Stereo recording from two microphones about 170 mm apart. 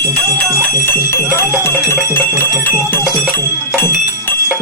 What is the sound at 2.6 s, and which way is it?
Music, 10° left (ahead or behind).